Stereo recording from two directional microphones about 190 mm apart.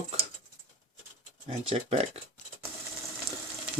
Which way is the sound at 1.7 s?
30° right (ahead or behind).